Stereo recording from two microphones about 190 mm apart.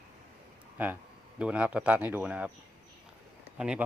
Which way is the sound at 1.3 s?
5° right (ahead or behind).